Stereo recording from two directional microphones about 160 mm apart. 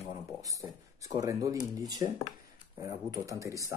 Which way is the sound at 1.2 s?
20° right (ahead or behind).